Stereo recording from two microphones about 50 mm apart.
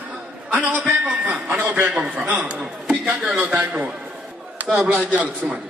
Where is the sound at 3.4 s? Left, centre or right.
Right.